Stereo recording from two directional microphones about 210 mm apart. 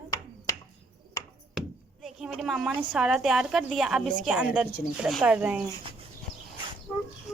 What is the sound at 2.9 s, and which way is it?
A woman's voice, 5° right (ahead or behind).